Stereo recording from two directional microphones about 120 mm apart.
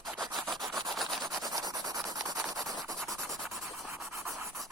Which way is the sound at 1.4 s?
30° right (ahead or behind).